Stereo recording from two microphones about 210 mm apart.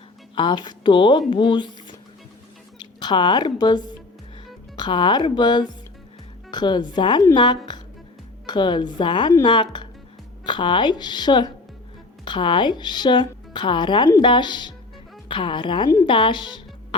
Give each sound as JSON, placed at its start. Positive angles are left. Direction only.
{"t": 0.3, "sound": "a woman's voice", "side_deg": 20}